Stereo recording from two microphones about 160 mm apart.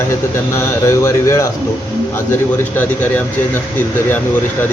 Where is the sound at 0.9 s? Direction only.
15° left (ahead or behind).